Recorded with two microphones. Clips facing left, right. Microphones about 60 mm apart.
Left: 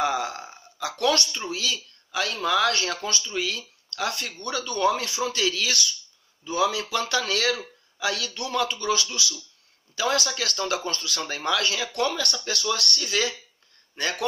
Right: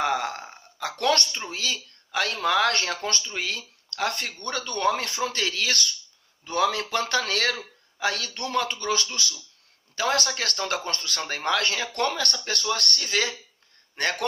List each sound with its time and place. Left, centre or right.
0.0 s burping: right
1.3 s speech: right
6.4 s speech: right